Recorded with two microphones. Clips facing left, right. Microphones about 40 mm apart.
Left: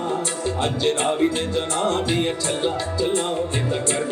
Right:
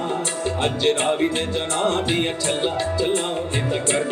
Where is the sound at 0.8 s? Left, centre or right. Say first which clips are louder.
Even; right.